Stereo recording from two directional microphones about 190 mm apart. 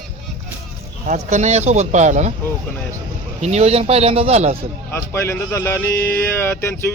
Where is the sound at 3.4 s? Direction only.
35° right (ahead or behind).